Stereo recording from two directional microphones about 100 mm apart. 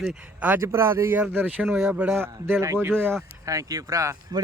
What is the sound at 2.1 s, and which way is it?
A man's voice, 25° right (ahead or behind).